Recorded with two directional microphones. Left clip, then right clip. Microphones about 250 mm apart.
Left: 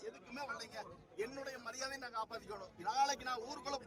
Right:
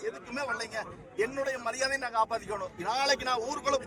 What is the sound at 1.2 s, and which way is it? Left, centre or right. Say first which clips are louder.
A man's voice: right 14 dB; centre.